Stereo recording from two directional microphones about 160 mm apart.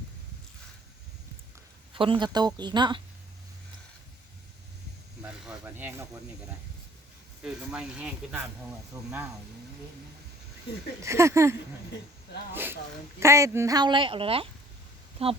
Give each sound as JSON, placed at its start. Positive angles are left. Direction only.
{"t": 1.9, "sound": "speech", "side_deg": -35}
{"t": 5.5, "sound": "speech", "side_deg": -10}
{"t": 7.4, "sound": "speech", "side_deg": -5}
{"t": 11.0, "sound": "speech", "side_deg": -15}
{"t": 13.1, "sound": "a woman's voice", "side_deg": -20}